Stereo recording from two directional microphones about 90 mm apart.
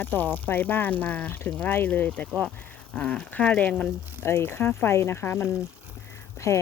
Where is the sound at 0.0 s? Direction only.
20° left (ahead or behind).